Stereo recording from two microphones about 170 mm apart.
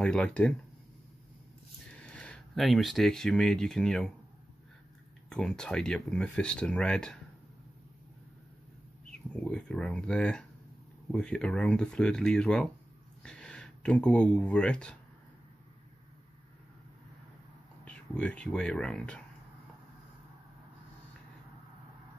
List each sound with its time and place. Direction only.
0.0 s speech: 5° left (ahead or behind)
2.0 s speech: 5° left (ahead or behind)
5.3 s speech: 5° left (ahead or behind)
9.3 s speech: 5° left (ahead or behind)
17.8 s speech: 5° left (ahead or behind)